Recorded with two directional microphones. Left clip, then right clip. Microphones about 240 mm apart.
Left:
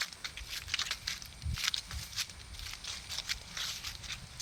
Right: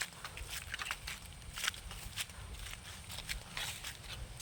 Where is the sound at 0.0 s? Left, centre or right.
Centre.